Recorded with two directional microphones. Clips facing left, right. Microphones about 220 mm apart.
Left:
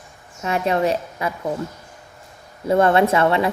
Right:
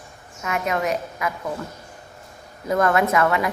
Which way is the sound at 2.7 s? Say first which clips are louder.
Left 4 dB; 30° left (ahead or behind).